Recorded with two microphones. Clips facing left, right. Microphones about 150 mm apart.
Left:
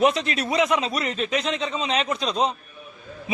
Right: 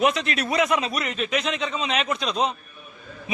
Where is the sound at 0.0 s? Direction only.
30° left (ahead or behind).